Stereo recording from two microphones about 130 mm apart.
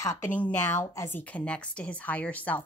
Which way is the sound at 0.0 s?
15° left (ahead or behind).